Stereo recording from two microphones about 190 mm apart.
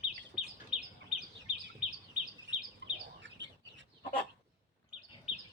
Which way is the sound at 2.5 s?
70° right (ahead or behind).